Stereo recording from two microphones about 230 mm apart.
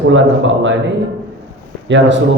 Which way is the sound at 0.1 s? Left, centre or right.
Right.